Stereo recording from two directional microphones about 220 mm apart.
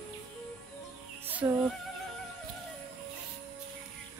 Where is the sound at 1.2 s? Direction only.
10° right (ahead or behind).